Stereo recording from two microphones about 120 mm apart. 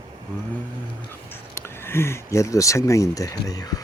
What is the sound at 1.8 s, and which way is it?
Speech, 20° left (ahead or behind).